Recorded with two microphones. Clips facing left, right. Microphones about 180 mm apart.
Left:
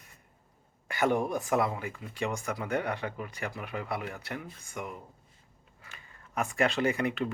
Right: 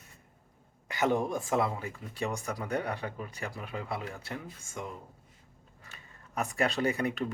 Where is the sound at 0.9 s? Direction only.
20° right (ahead or behind).